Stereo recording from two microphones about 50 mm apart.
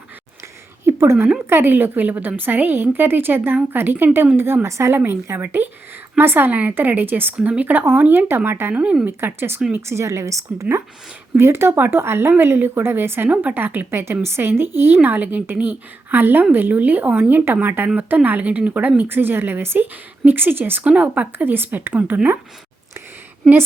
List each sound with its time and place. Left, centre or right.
0.9 s a sound: right
1.5 s a woman's voice: right
4.9 s a woman's voice: right
7.3 s a woman's voice: right
8.4 s a woman's voice: right
8.7 s speech: right
9.0 s a woman's voice: right
9.8 s a woman's voice: right
11.3 s a woman's voice: right
13.2 s a woman's voice: right
13.9 s a woman's voice: right
15.0 s a woman's voice: right
19.0 s a woman's voice: right